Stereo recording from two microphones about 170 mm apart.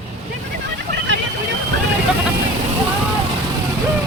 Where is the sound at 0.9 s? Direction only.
90° right.